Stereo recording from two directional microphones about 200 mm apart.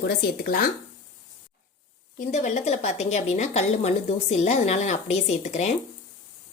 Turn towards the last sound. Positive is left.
turn(degrees=35)  # may be behind; listen again after turning